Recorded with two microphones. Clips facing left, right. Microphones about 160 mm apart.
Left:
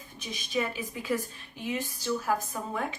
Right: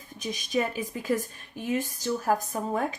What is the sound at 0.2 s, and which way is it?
A woman's voice, 45° right (ahead or behind).